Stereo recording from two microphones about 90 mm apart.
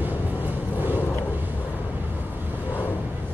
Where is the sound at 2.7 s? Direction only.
20° left (ahead or behind).